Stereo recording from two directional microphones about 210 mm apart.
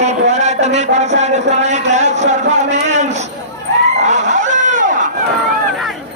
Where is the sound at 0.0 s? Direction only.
35° right (ahead or behind).